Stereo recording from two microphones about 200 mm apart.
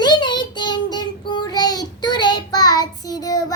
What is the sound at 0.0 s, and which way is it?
Child singing, 20° left (ahead or behind).